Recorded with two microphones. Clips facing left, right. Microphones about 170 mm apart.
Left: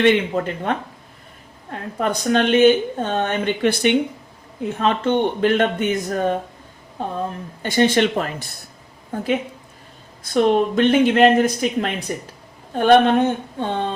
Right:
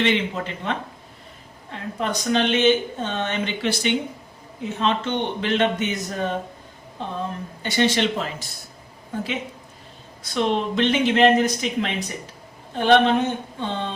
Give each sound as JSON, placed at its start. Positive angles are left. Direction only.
{"t": 0.0, "sound": "speech", "side_deg": 50}
{"t": 7.6, "sound": "speech", "side_deg": 50}
{"t": 10.2, "sound": "speech", "side_deg": 45}